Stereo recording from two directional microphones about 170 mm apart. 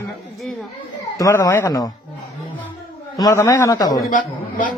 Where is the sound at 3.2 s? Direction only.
20° left (ahead or behind).